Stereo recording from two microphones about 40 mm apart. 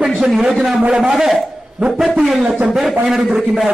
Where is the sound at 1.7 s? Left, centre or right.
Centre.